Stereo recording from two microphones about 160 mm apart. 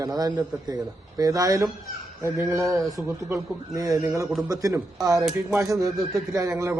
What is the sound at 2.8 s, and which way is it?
A man's voice, 20° right (ahead or behind).